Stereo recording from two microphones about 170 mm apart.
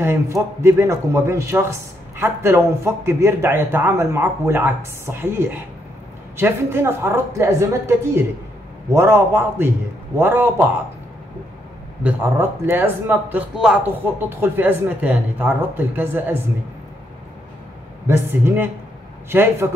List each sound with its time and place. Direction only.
0.0 s a man's voice: 15° right (ahead or behind)
12.0 s a man's voice: 10° right (ahead or behind)
18.0 s a man's voice: 15° right (ahead or behind)